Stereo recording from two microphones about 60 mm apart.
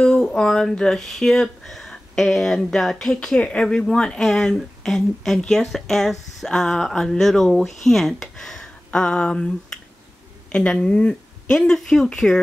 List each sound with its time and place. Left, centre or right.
0.0 s speech: centre